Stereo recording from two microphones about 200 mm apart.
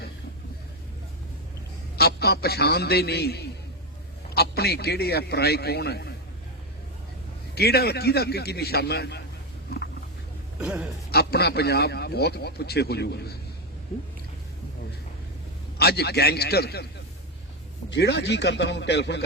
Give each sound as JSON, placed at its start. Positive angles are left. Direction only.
{"t": 2.0, "sound": "a man's voice", "side_deg": 55}
{"t": 7.5, "sound": "a man's voice", "side_deg": 50}
{"t": 9.6, "sound": "a sound", "side_deg": 50}
{"t": 10.6, "sound": "speech", "side_deg": -5}
{"t": 11.1, "sound": "a man's voice", "side_deg": 55}
{"t": 15.8, "sound": "a man's voice", "side_deg": 50}
{"t": 17.9, "sound": "speech", "side_deg": 60}